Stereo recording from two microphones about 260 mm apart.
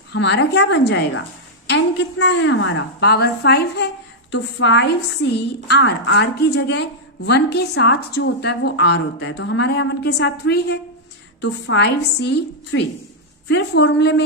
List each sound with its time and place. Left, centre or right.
0.1 s a woman's voice: left